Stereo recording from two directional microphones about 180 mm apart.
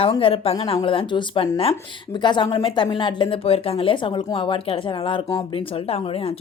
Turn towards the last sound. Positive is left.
turn(degrees=35)  # may be behind; listen again after turning